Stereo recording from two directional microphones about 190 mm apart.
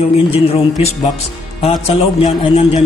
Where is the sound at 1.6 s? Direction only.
25° left (ahead or behind).